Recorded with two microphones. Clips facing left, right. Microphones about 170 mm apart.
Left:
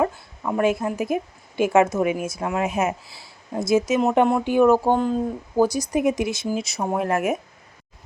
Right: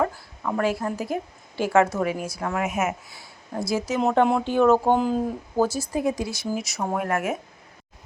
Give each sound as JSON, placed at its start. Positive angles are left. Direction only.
{"t": 0.0, "sound": "a woman's voice", "side_deg": 20}
{"t": 2.6, "sound": "speech", "side_deg": 30}
{"t": 3.5, "sound": "speech", "side_deg": 20}
{"t": 4.3, "sound": "speech", "side_deg": 10}
{"t": 4.9, "sound": "speech", "side_deg": -5}
{"t": 5.5, "sound": "speech", "side_deg": 15}